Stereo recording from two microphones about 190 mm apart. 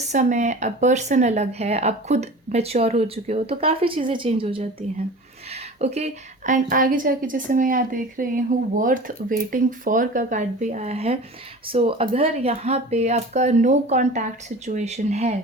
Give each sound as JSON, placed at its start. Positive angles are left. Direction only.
{"t": 0.0, "sound": "a woman's voice", "side_deg": -40}